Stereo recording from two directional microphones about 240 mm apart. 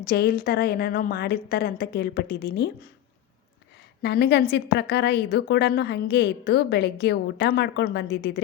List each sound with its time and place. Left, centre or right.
0.0 s a woman's voice: left
4.0 s a woman's voice: left